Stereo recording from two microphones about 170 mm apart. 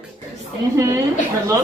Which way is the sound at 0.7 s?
15° right (ahead or behind).